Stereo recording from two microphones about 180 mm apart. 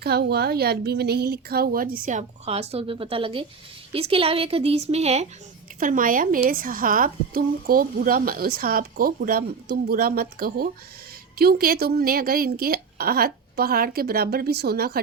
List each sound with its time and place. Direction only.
0.0 s a woman's voice: 60° right (ahead or behind); by 5.3 s 35° right (ahead or behind)
5.8 s a woman's voice: 50° right (ahead or behind)